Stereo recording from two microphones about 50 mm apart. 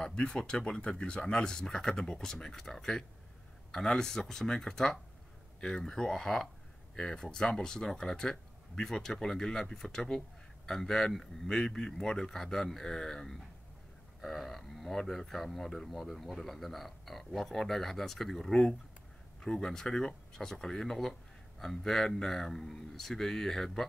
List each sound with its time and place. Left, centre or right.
0.0 s speech: centre